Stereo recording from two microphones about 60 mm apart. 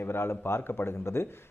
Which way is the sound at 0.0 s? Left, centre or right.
Left.